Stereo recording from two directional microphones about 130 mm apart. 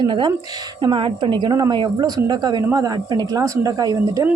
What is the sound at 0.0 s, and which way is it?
A woman's voice, 35° right (ahead or behind).